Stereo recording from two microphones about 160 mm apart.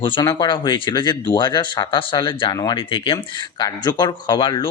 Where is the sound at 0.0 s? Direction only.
30° left (ahead or behind).